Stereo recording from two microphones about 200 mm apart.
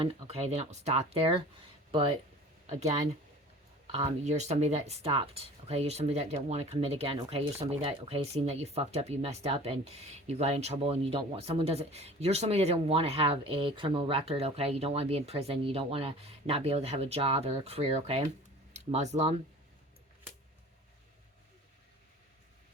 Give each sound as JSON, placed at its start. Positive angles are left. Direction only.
{"t": 0.0, "sound": "speech", "side_deg": -30}
{"t": 3.9, "sound": "speech", "side_deg": -35}